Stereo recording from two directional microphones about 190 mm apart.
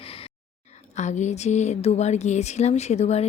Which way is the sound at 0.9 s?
40° left (ahead or behind).